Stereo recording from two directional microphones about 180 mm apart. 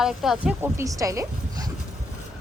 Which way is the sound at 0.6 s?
15° right (ahead or behind).